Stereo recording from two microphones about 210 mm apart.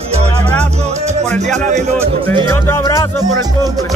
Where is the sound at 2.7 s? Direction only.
15° left (ahead or behind).